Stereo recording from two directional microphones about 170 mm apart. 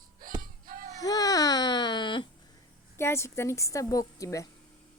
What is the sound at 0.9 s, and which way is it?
Baby cry, 20° left (ahead or behind).